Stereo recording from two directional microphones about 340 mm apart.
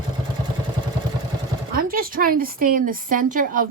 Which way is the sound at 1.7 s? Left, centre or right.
Right.